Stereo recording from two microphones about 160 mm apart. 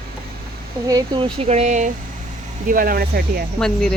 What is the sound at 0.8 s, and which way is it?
Speech, 25° right (ahead or behind).